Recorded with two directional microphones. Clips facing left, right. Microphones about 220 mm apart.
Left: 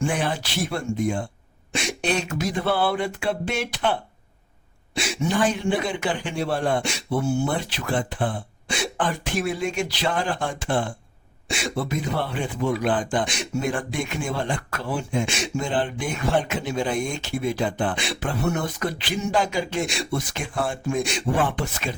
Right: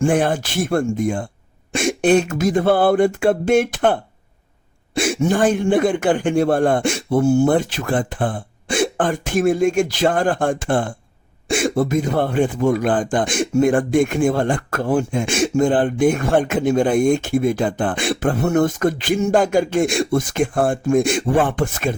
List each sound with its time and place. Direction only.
0.0 s speech: 50° right (ahead or behind)
4.9 s speech: 50° right (ahead or behind)